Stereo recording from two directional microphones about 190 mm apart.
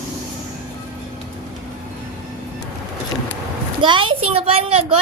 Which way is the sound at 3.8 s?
25° right (ahead or behind).